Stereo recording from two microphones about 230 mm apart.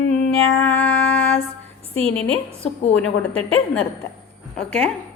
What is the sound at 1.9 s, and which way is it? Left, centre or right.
Speech, right.